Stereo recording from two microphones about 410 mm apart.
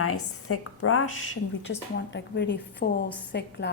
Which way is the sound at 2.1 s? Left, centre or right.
Left.